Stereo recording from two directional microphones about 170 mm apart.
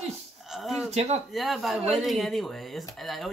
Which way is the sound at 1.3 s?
Centre (ahead or behind).